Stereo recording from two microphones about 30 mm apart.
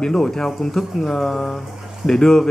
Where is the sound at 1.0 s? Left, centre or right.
Centre.